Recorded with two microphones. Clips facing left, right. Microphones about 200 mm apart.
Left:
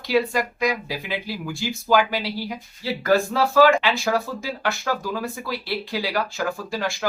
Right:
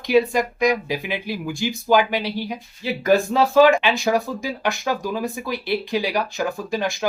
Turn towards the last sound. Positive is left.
turn(degrees=-20)  # may be behind; listen again after turning